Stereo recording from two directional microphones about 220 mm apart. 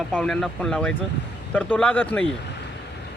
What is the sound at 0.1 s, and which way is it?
Speech, 5° left (ahead or behind).